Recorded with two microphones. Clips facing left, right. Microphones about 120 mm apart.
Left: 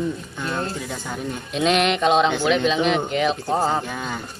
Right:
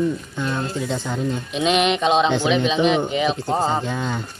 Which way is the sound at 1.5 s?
Centre (ahead or behind).